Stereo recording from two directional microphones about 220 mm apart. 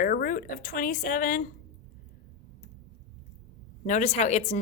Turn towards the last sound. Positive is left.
turn(degrees=30)  # may be behind; listen again after turning